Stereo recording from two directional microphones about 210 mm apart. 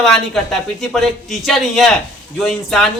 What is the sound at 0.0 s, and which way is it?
A man's voice, centre (ahead or behind).